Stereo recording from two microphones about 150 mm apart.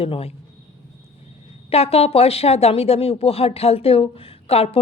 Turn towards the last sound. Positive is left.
turn(degrees=40)  # may be behind; listen again after turning